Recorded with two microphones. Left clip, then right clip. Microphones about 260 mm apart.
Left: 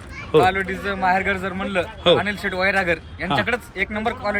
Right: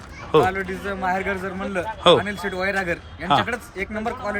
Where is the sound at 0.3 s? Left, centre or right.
Centre.